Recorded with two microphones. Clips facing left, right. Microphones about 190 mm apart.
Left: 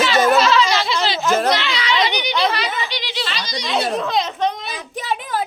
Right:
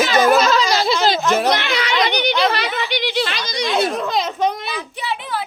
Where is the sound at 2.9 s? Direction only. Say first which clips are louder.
Right 6 dB; 55° right (ahead or behind).